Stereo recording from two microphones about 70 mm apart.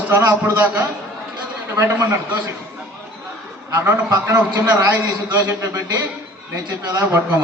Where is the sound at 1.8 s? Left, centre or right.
Right.